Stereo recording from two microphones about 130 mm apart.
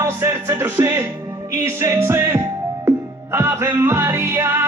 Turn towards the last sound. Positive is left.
turn(degrees=-20)  # may be behind; listen again after turning